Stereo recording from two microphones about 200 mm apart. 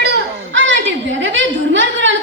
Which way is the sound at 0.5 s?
70° right (ahead or behind).